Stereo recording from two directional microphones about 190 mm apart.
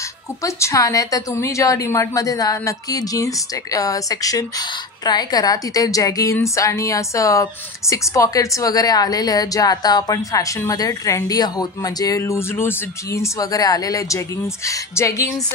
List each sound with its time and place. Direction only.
0.4 s a woman's voice: 15° left (ahead or behind)